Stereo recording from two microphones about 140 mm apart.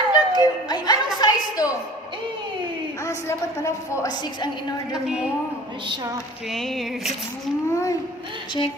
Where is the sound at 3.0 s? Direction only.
20° left (ahead or behind).